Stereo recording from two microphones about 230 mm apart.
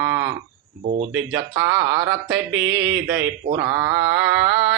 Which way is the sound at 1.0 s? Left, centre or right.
Right.